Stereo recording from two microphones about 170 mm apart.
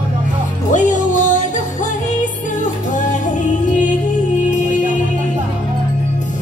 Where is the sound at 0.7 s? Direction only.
50° left (ahead or behind).